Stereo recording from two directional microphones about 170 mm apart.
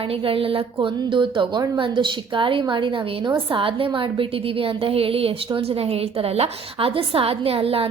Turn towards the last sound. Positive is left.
turn(degrees=-35)  # may be behind; listen again after turning